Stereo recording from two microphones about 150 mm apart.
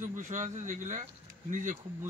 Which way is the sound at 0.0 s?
55° right (ahead or behind).